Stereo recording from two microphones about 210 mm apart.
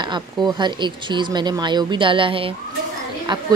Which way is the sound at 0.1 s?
20° right (ahead or behind).